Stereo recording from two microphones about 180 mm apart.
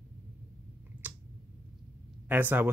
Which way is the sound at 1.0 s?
10° right (ahead or behind).